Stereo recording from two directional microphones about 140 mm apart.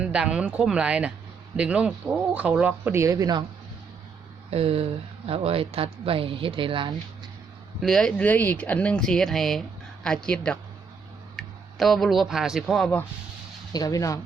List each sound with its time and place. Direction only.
0.0 s speech: 5° right (ahead or behind); by 3.4 s 25° right (ahead or behind)
4.5 s speech: 45° right (ahead or behind)
7.8 s speech: 5° left (ahead or behind)
13.7 s speech: 25° left (ahead or behind)